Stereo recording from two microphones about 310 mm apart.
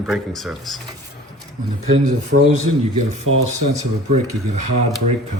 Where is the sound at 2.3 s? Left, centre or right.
Right.